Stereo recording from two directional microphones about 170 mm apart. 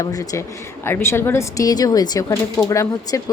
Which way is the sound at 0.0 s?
20° left (ahead or behind).